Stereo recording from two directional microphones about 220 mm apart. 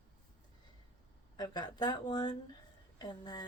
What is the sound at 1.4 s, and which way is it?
Speech, 20° left (ahead or behind).